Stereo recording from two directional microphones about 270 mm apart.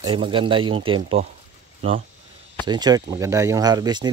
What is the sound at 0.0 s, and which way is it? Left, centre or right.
Speech, centre.